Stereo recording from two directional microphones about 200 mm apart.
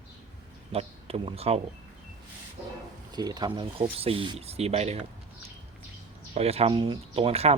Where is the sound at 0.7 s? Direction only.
30° right (ahead or behind).